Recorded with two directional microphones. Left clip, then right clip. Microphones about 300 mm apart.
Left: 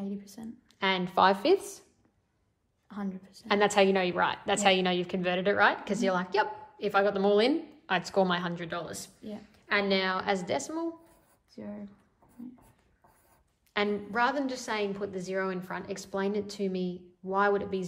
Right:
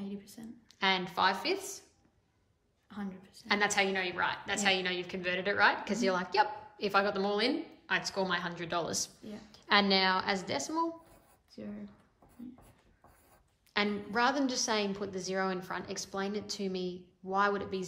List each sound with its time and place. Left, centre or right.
0.0 s a sound: centre
0.7 s a woman's voice: centre
2.9 s a woman's voice: centre
13.7 s a woman's voice: centre